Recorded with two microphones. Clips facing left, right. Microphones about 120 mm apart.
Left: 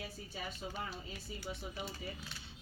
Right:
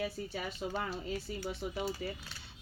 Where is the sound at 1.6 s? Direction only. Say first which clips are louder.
Right 7 dB; 65° right (ahead or behind).